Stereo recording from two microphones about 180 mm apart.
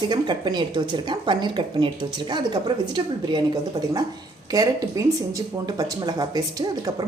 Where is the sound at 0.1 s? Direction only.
25° right (ahead or behind).